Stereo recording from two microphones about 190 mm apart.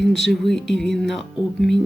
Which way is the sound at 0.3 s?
Centre (ahead or behind).